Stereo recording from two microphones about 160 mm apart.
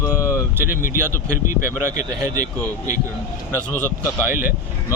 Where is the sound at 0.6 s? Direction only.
60° left (ahead or behind).